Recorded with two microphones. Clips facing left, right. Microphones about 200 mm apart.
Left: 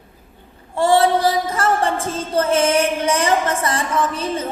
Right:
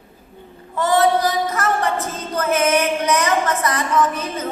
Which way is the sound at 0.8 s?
30° left (ahead or behind).